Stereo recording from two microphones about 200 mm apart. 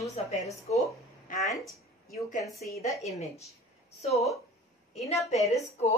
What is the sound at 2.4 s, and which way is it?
Speech, 15° left (ahead or behind).